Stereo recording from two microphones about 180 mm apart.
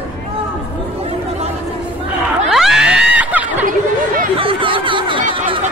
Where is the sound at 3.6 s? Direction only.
50° right (ahead or behind).